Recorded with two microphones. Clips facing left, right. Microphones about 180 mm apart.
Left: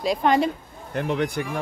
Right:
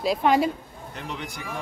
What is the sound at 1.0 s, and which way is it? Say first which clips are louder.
Speech: left 12 dB; 55° left (ahead or behind).